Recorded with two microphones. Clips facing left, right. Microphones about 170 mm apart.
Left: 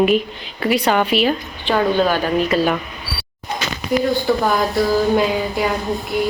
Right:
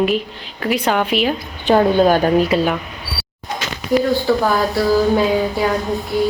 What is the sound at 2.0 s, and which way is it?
Speech, 45° right (ahead or behind).